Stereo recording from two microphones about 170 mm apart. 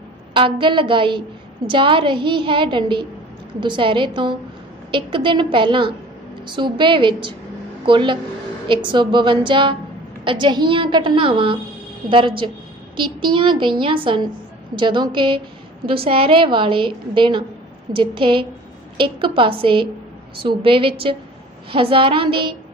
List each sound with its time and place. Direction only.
0.3 s a woman's voice: 30° right (ahead or behind)